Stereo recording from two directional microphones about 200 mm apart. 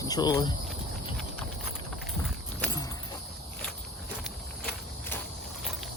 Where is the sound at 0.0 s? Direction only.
20° left (ahead or behind).